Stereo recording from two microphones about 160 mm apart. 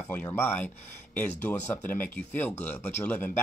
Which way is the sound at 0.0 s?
15° left (ahead or behind).